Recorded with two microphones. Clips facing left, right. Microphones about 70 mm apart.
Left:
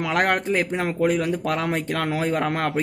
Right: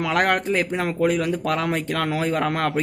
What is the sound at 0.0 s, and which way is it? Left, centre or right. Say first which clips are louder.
Speech: right 1 dB; left.